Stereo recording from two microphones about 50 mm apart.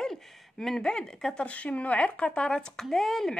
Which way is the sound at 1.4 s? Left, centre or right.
Left.